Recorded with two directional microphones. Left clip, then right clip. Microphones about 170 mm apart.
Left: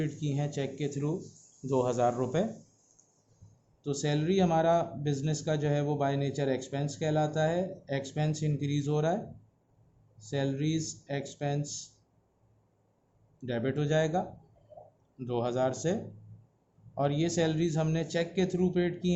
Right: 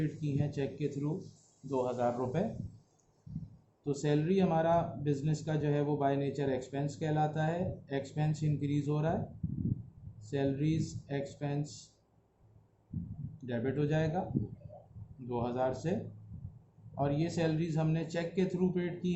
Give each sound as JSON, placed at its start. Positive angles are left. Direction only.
{"t": 0.0, "sound": "speech", "side_deg": 50}
{"t": 3.8, "sound": "speech", "side_deg": 50}
{"t": 10.2, "sound": "speech", "side_deg": 50}
{"t": 13.4, "sound": "speech", "side_deg": 50}
{"t": 15.3, "sound": "speech", "side_deg": 50}
{"t": 17.0, "sound": "speech", "side_deg": 50}